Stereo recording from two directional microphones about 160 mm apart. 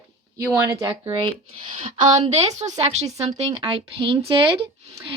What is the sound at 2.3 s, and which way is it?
Speech, 45° right (ahead or behind).